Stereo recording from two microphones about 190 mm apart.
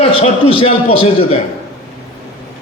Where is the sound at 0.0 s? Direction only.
30° left (ahead or behind).